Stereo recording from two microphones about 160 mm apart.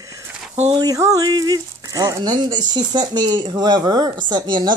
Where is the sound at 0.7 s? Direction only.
20° right (ahead or behind).